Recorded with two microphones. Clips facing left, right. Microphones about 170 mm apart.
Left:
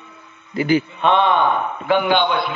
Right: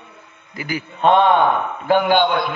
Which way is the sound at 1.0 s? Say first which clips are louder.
Right 7 dB; 45° right (ahead or behind).